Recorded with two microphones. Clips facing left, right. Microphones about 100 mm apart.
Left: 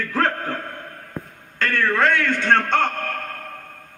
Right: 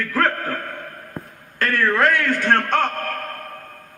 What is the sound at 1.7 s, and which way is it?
A man's voice, 25° left (ahead or behind).